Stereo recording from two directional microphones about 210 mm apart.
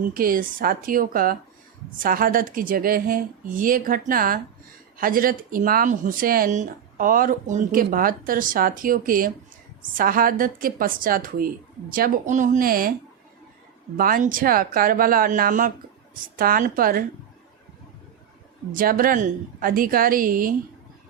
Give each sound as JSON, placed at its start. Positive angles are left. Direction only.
{"t": 0.1, "sound": "a woman's voice", "side_deg": -40}
{"t": 13.9, "sound": "a woman's voice", "side_deg": -45}
{"t": 18.7, "sound": "a woman's voice", "side_deg": -40}